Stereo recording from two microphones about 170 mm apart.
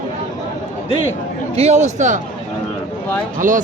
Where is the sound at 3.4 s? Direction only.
50° right (ahead or behind).